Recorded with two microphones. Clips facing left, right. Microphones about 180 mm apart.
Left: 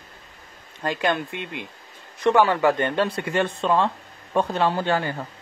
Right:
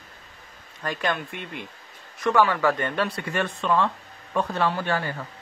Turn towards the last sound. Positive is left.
turn(degrees=20)  # may be behind; listen again after turning